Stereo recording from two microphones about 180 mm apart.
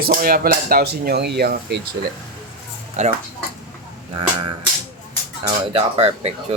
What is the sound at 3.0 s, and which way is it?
Speech, 40° right (ahead or behind).